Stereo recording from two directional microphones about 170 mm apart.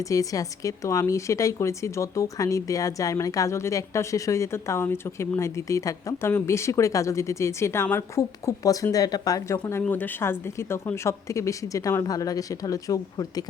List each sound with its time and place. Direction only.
0.0 s speech: 20° left (ahead or behind)